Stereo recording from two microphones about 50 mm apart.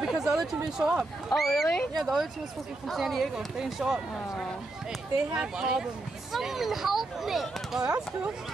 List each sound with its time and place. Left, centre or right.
0.0 s a sound: centre
0.7 s speech: centre
1.3 s speech: centre
3.3 s speech: centre
5.3 s speech: centre
6.3 s speech: centre